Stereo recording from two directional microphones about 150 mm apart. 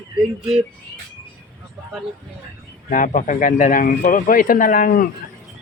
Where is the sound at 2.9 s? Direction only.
60° left (ahead or behind).